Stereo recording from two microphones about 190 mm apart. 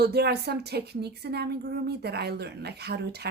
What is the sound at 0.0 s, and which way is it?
A woman's voice, 60° right (ahead or behind).